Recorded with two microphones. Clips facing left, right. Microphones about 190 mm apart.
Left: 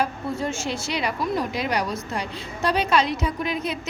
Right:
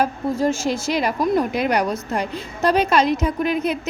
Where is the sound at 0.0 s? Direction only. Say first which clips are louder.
Right 6 dB; 40° right (ahead or behind).